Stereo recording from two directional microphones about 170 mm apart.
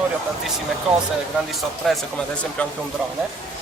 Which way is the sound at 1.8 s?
Centre (ahead or behind).